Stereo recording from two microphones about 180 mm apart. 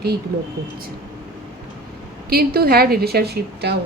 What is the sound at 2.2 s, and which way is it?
A woman's voice, 60° right (ahead or behind).